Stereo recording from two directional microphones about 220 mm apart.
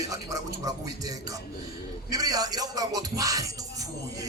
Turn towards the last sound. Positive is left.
turn(degrees=-15)  # may be behind; listen again after turning